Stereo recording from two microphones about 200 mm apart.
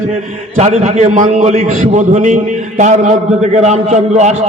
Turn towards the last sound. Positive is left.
turn(degrees=-35)  # may be behind; listen again after turning